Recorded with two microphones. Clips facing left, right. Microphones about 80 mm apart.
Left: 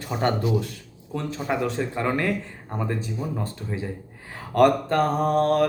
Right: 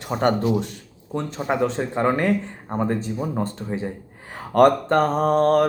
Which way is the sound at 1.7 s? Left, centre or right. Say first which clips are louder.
Right 4 dB; right.